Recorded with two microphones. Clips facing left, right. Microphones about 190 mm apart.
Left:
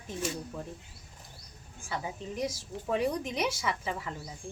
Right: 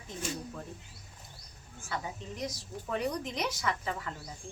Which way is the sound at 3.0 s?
10° left (ahead or behind).